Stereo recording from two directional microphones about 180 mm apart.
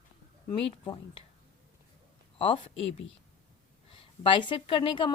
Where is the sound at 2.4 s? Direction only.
30° left (ahead or behind).